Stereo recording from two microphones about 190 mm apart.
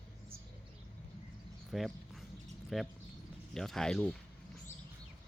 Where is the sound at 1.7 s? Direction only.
Centre (ahead or behind).